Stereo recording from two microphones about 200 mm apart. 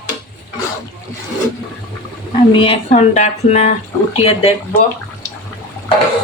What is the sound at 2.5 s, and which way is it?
Speech, 25° left (ahead or behind).